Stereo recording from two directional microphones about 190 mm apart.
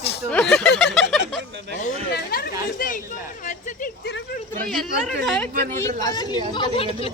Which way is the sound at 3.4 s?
40° left (ahead or behind).